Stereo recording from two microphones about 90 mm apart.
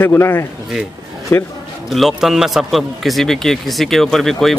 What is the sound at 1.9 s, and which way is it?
A man's voice, centre (ahead or behind).